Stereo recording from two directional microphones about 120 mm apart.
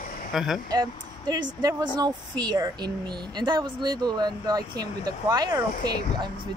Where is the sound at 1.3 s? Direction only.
35° right (ahead or behind).